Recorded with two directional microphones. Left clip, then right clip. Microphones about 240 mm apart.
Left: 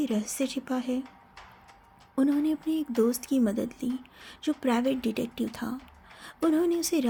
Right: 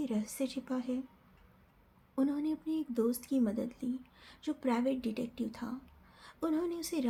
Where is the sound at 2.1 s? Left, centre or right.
Left.